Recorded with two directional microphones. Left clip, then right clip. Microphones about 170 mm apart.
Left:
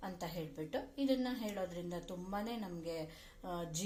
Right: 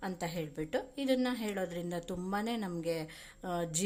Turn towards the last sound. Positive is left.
turn(degrees=-40)  # may be behind; listen again after turning